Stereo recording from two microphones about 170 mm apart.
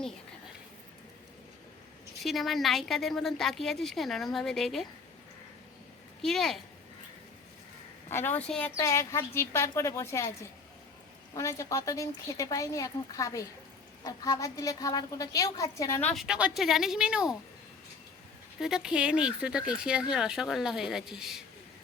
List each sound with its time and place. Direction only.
2.2 s speech: centre (ahead or behind)
6.2 s speech: centre (ahead or behind)
8.1 s a woman's voice: 10° left (ahead or behind)
8.7 s a woman's voice: 15° left (ahead or behind)
16.2 s speech: 5° right (ahead or behind)
18.6 s speech: 5° right (ahead or behind)